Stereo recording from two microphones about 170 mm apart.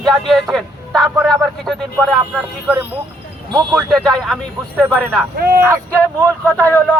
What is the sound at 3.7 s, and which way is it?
Speech, centre (ahead or behind).